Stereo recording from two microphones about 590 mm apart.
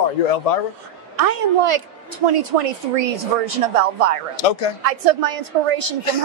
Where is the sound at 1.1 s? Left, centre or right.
Right.